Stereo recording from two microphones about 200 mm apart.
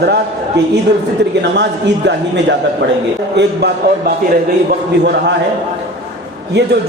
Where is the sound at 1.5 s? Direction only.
60° right (ahead or behind).